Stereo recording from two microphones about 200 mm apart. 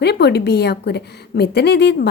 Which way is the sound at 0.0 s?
55° left (ahead or behind).